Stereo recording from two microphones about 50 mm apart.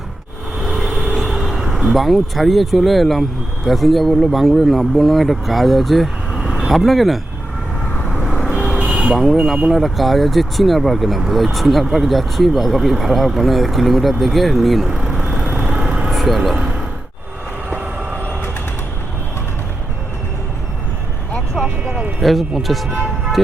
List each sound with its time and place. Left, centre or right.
0.6 s vehicle: centre
1.5 s speech: centre
8.2 s vehicle: centre
8.8 s vehicle: right
9.1 s speech: centre
15.1 s vehicle: centre
16.0 s vehicle: centre
21.8 s vehicle: right
22.2 s speech: centre